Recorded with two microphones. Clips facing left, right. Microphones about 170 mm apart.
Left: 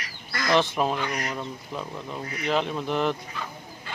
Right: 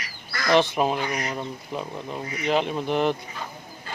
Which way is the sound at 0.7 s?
10° right (ahead or behind).